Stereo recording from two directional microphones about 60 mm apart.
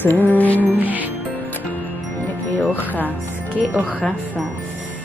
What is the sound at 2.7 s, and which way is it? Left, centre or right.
Wind chime, left.